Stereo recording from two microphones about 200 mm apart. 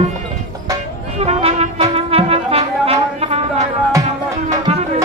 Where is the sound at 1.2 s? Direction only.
30° right (ahead or behind).